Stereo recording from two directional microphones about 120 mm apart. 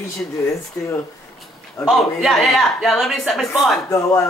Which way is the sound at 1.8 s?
Centre (ahead or behind).